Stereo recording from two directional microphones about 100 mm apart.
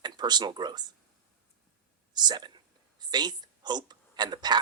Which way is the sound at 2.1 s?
45° right (ahead or behind).